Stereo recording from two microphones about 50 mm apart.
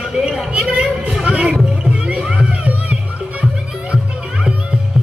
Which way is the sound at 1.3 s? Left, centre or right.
Right.